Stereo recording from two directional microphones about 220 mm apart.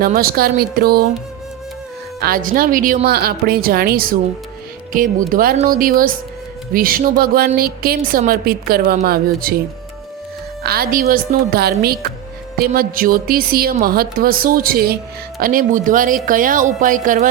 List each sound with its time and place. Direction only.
0.0 s a woman's voice: 40° right (ahead or behind)
2.2 s a woman's voice: 40° right (ahead or behind)
10.6 s a woman's voice: 45° right (ahead or behind)